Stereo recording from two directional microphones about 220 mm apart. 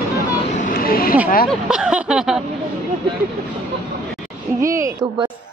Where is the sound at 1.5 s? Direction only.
5° right (ahead or behind).